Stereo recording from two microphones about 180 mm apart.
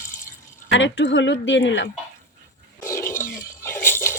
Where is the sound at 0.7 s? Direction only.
90° left.